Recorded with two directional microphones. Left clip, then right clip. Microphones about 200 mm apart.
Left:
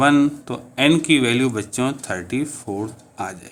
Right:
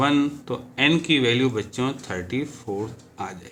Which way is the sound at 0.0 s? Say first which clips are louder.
Left 5 dB; 50° left (ahead or behind).